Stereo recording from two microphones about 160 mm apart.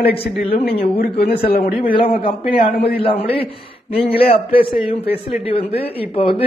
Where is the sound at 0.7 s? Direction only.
75° left (ahead or behind).